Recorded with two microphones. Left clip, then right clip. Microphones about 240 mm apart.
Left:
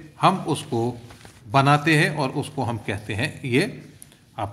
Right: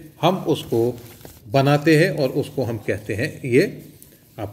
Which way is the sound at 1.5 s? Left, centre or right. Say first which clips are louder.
Right 1 dB; centre.